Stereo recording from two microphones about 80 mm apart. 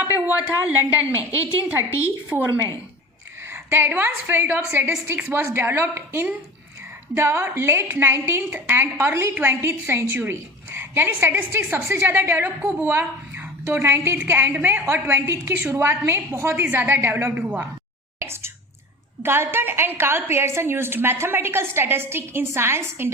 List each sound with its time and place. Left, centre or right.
0.0 s a sound: centre
1.1 s a woman's voice: left
2.3 s a woman's voice: centre
3.5 s a woman's voice: right
18.2 s whispering: right
19.2 s a woman's voice: right